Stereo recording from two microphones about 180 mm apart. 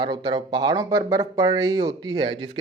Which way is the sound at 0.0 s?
25° right (ahead or behind).